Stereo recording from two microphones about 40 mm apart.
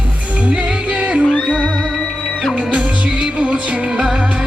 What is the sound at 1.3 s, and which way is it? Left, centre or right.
Music, left.